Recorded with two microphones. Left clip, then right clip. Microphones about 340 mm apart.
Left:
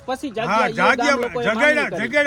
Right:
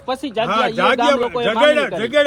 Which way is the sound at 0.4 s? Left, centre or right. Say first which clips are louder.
Right 1 dB; centre.